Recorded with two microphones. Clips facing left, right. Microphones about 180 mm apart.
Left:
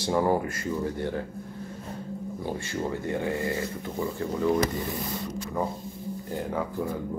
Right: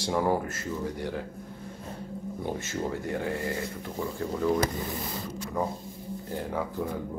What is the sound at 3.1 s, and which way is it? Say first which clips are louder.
Speech: left 2 dB; 5° left (ahead or behind).